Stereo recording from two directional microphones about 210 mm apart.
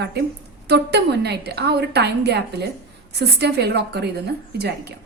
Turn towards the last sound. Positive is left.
turn(degrees=-50)  # may be behind; listen again after turning